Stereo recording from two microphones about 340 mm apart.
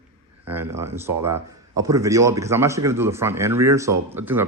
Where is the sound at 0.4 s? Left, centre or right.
Centre.